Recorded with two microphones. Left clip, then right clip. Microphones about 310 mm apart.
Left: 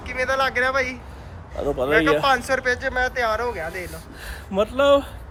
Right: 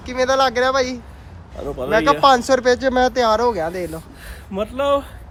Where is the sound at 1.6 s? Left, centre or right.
Centre.